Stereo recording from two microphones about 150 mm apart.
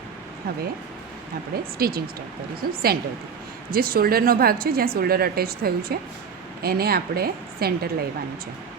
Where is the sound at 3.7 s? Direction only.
80° right.